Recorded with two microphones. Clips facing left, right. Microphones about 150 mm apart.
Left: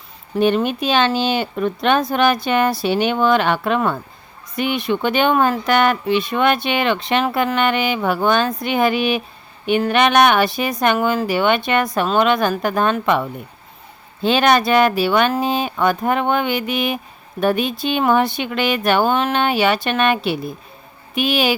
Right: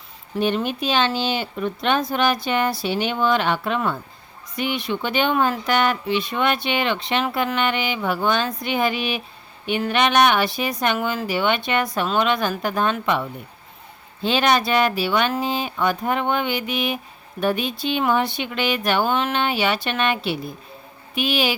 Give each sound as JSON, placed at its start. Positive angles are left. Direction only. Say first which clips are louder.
{"t": 0.3, "sound": "speech", "louder": "left 5 dB", "side_deg": 55}